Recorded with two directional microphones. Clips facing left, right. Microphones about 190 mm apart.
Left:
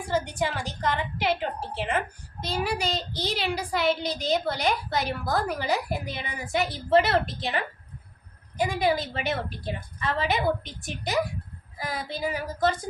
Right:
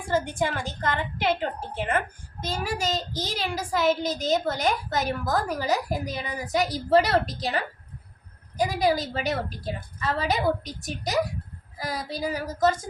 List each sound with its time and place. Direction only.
0.1 s child singing: 50° right (ahead or behind)
8.5 s a woman's voice: 40° right (ahead or behind)